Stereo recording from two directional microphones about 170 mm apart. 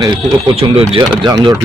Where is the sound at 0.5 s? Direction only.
35° right (ahead or behind).